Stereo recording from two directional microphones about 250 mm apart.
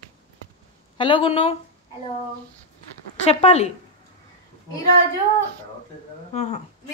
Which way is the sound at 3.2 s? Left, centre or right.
Left.